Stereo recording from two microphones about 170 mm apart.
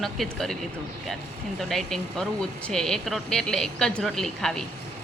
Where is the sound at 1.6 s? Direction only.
Centre (ahead or behind).